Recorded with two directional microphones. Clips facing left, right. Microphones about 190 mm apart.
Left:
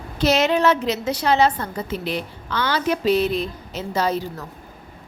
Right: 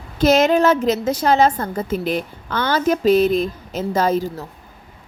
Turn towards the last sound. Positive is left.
turn(degrees=-50)  # may be behind; listen again after turning